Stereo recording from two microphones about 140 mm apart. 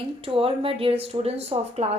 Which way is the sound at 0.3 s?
40° right (ahead or behind).